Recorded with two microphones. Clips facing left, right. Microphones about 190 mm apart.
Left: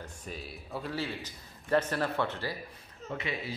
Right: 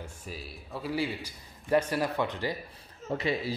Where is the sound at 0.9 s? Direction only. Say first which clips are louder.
Right 4 dB; 15° right (ahead or behind).